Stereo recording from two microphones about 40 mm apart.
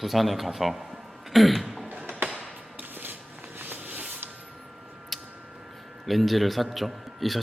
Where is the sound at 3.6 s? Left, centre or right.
Right.